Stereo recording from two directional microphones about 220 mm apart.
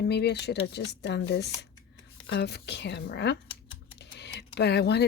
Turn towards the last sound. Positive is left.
turn(degrees=50)  # may be behind; listen again after turning